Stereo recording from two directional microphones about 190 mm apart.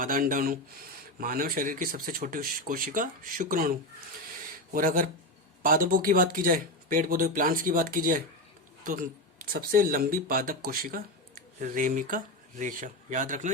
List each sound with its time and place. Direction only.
0.0 s speech: 45° right (ahead or behind)